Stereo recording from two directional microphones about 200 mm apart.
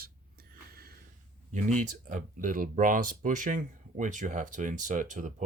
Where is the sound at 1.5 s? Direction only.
35° right (ahead or behind).